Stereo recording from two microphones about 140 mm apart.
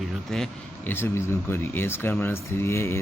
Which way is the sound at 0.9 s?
15° left (ahead or behind).